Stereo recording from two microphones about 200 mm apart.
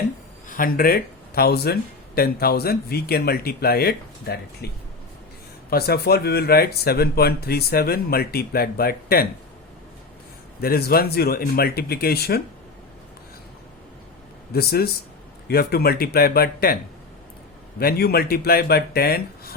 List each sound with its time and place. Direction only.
0.4 s speech: 45° left (ahead or behind)
10.6 s speech: 50° left (ahead or behind)
14.5 s speech: 50° left (ahead or behind)
17.7 s speech: 50° left (ahead or behind)